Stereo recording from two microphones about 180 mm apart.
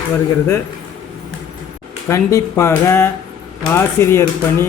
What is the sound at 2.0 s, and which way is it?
A man's voice, 15° left (ahead or behind).